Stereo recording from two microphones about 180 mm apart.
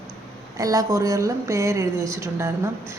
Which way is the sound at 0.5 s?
20° right (ahead or behind).